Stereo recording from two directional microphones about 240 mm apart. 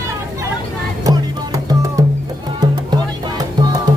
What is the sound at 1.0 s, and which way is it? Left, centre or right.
Music, centre.